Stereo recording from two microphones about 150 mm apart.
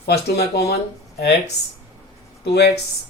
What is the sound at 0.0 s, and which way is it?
Speech, 90° left.